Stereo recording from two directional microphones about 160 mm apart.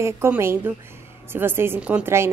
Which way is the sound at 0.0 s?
15° right (ahead or behind).